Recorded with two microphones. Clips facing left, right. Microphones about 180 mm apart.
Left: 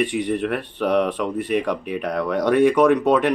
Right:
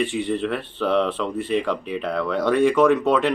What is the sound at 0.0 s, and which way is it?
Speech, 15° left (ahead or behind).